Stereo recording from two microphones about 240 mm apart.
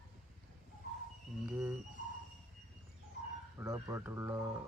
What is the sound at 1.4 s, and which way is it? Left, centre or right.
Speech, centre.